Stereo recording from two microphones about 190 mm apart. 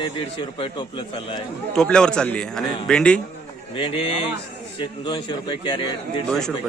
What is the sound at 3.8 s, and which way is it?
Speech, 30° left (ahead or behind).